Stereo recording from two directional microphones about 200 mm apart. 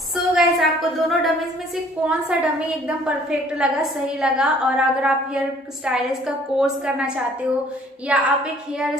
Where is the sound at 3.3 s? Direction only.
5° right (ahead or behind).